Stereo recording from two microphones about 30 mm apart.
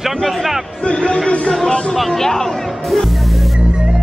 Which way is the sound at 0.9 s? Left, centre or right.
Left.